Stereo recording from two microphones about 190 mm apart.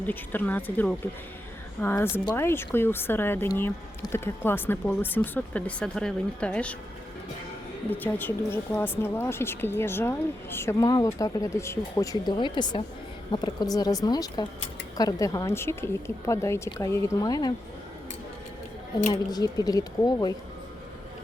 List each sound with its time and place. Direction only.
0.1 s a woman's voice: 10° left (ahead or behind)
7.9 s a woman's voice: 10° left (ahead or behind)
19.3 s a woman's voice: 20° left (ahead or behind)